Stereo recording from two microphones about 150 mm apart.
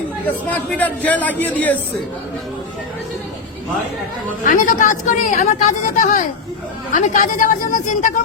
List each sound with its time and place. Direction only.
0.3 s a man's voice: 10° left (ahead or behind)
4.4 s a woman's voice: 60° left (ahead or behind)